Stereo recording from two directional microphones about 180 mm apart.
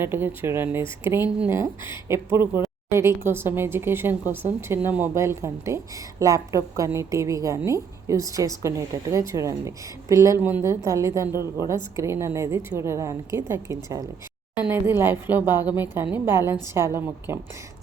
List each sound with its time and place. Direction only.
0.0 s a woman's voice: 15° right (ahead or behind)